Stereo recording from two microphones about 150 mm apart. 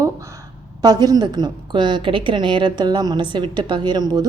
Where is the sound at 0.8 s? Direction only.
25° right (ahead or behind).